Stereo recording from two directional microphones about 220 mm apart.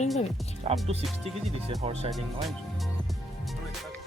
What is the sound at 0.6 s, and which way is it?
Music, 30° right (ahead or behind).